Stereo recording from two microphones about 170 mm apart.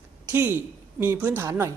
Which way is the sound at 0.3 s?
15° right (ahead or behind).